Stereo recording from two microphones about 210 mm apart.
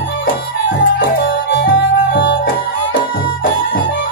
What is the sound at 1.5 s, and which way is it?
Music, 60° left (ahead or behind).